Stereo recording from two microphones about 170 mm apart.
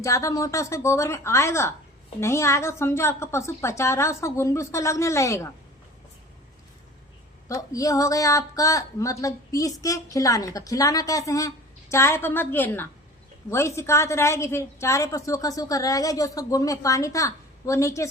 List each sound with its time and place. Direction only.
0.0 s a woman's voice: 20° left (ahead or behind)
7.4 s a woman's voice: 20° left (ahead or behind)